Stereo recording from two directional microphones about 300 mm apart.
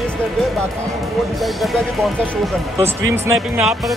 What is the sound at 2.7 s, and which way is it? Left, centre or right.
Speech, centre.